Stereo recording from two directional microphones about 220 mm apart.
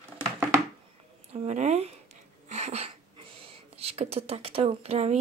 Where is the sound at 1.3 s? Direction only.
30° right (ahead or behind).